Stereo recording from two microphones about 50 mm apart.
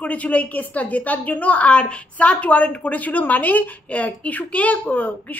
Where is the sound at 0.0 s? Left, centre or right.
Left.